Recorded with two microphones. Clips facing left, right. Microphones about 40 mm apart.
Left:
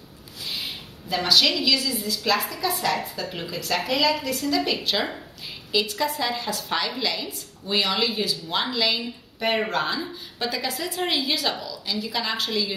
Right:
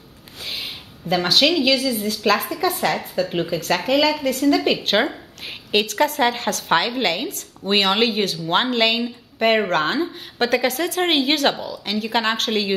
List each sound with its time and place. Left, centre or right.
0.4 s a woman's voice: right